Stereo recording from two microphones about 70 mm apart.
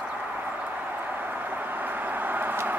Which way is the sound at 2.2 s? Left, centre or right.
Right.